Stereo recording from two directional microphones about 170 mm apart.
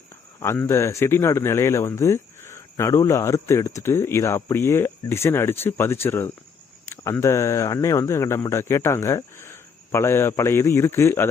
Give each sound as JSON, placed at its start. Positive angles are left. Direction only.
{"t": 0.3, "sound": "speech", "side_deg": 15}